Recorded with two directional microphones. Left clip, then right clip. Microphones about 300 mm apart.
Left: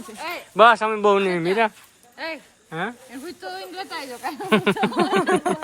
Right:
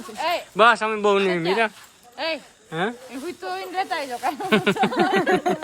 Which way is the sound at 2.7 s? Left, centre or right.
Centre.